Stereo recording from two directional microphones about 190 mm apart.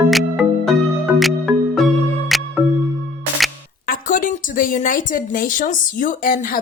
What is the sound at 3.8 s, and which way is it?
A woman's voice, 45° left (ahead or behind).